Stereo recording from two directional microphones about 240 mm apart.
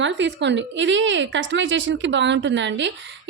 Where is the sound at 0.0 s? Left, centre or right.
Right.